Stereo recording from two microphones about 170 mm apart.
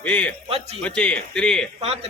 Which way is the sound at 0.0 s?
5° left (ahead or behind).